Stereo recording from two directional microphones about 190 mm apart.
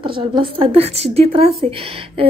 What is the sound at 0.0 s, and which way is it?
A woman's voice, 25° right (ahead or behind).